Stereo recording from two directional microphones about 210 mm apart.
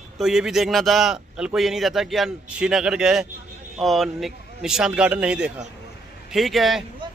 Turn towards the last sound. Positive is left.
turn(degrees=0)  # may be behind; listen again after turning